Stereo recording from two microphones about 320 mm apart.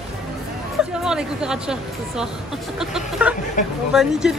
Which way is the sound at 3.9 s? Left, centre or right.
Centre.